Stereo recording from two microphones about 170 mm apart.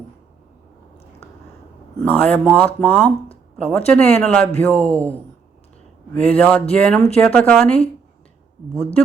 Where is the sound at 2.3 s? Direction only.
10° left (ahead or behind).